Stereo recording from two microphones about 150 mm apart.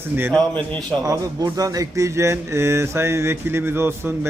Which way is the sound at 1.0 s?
20° right (ahead or behind).